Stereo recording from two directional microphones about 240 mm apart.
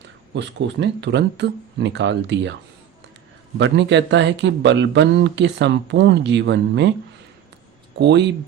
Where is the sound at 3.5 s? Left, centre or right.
Right.